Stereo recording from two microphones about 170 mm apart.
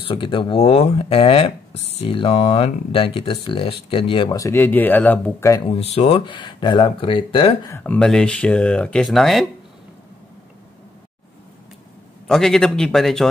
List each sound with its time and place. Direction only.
0.0 s speech: 30° left (ahead or behind)
4.4 s speech: 15° left (ahead or behind)
5.7 s speech: 35° left (ahead or behind)
7.6 s speech: 15° left (ahead or behind)
12.3 s speech: 5° left (ahead or behind)